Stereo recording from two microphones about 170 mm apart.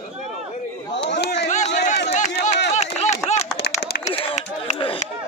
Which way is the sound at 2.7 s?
40° left (ahead or behind).